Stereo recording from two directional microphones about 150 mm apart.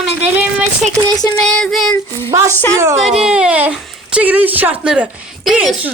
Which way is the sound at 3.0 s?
5° right (ahead or behind).